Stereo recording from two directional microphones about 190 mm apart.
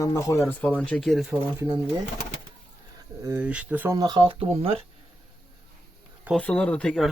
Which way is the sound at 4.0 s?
20° right (ahead or behind).